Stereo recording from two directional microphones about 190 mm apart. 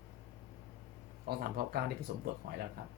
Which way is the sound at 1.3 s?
55° right (ahead or behind).